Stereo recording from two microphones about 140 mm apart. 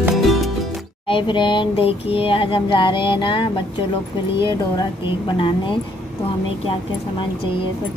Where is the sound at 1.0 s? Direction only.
35° left (ahead or behind).